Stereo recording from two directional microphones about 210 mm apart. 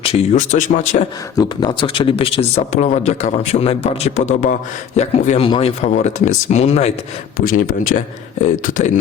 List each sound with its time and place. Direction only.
0.0 s speech: 30° left (ahead or behind)
1.4 s speech: 20° left (ahead or behind)
7.3 s speech: 40° left (ahead or behind)